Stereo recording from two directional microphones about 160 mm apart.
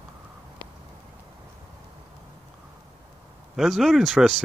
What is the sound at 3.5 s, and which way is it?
Speech, centre (ahead or behind).